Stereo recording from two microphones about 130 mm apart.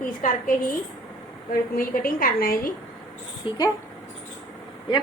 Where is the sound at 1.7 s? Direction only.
90° left.